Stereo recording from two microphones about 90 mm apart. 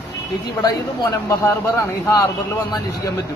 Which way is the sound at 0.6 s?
50° left (ahead or behind).